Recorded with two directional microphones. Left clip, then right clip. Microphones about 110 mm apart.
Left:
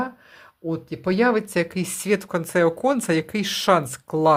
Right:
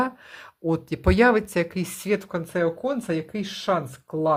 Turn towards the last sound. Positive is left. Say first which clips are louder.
# left 5 dB
turn(degrees=30)  # may be behind; listen again after turning